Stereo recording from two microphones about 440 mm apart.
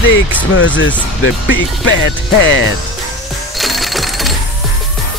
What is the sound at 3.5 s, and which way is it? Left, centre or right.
Cash register, centre.